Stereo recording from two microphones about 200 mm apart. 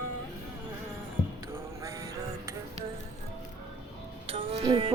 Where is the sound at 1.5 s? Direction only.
15° right (ahead or behind).